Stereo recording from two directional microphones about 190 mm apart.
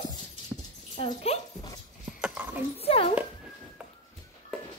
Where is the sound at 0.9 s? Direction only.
30° left (ahead or behind).